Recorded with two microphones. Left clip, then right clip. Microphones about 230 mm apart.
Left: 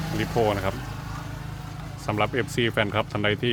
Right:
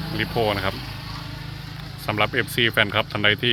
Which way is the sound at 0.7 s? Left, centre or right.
Left.